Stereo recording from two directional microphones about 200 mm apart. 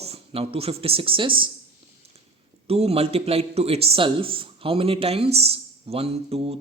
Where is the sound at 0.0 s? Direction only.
30° right (ahead or behind).